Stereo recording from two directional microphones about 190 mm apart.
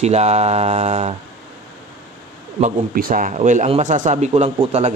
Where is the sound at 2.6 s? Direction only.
50° right (ahead or behind).